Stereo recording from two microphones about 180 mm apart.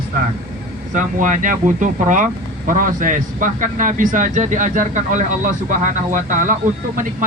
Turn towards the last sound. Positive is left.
turn(degrees=-45)  # may be behind; listen again after turning